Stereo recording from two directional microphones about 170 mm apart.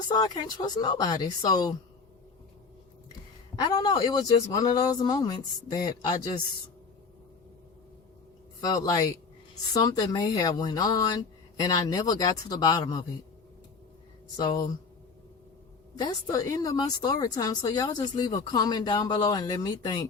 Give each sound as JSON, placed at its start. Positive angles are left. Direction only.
{"t": 0.1, "sound": "speech", "side_deg": 25}
{"t": 3.5, "sound": "speech", "side_deg": 25}
{"t": 8.6, "sound": "speech", "side_deg": 20}
{"t": 14.3, "sound": "speech", "side_deg": 25}
{"t": 16.0, "sound": "speech", "side_deg": 25}